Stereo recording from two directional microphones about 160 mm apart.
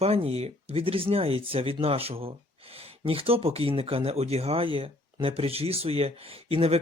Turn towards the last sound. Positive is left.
turn(degrees=-35)  # may be behind; listen again after turning